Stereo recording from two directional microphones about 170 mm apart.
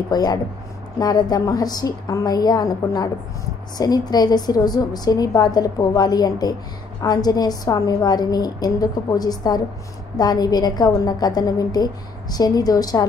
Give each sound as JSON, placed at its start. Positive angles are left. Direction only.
{"t": 0.1, "sound": "a woman's voice", "side_deg": 25}